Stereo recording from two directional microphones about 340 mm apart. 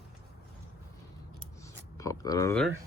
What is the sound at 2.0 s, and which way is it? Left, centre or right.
Speech, centre.